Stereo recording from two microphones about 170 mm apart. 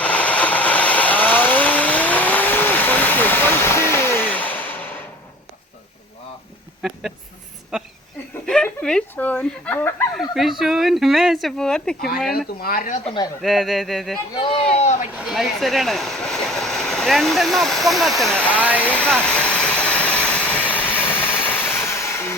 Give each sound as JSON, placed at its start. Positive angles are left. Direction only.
{"t": 0.0, "sound": "vehicle", "side_deg": 10}
{"t": 7.7, "sound": "a sound", "side_deg": -5}
{"t": 10.2, "sound": "speech", "side_deg": 0}
{"t": 12.5, "sound": "speech", "side_deg": 55}
{"t": 13.1, "sound": "speech", "side_deg": 25}
{"t": 13.4, "sound": "speech", "side_deg": 0}
{"t": 14.3, "sound": "speech", "side_deg": 30}
{"t": 15.2, "sound": "speech", "side_deg": 0}
{"t": 18.5, "sound": "speech", "side_deg": -10}
{"t": 18.9, "sound": "a sound", "side_deg": 5}